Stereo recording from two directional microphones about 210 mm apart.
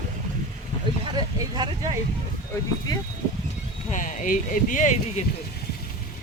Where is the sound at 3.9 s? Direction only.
40° left (ahead or behind).